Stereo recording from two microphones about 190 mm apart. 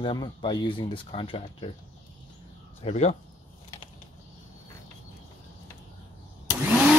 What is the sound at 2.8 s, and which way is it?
Speech, 35° left (ahead or behind).